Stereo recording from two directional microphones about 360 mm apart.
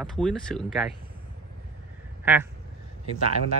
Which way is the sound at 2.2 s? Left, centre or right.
Centre.